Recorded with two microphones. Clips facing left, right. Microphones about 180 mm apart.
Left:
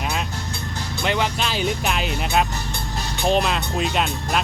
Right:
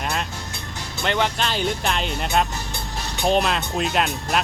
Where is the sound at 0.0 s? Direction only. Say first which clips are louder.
Even; 5° left (ahead or behind).